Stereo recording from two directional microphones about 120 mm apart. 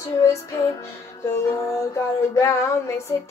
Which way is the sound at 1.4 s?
25° left (ahead or behind).